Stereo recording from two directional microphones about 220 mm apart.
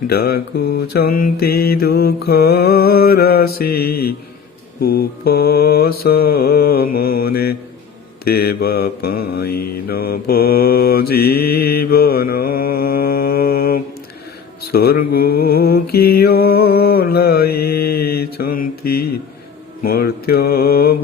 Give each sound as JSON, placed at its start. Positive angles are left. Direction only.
{"t": 0.1, "sound": "mantra", "side_deg": 45}